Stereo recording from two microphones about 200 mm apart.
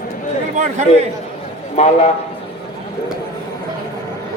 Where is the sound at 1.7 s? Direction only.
30° left (ahead or behind).